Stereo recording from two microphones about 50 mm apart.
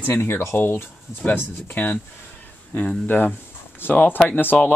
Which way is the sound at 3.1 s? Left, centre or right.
Left.